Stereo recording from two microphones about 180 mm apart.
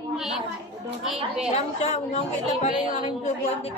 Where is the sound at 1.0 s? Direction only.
Centre (ahead or behind).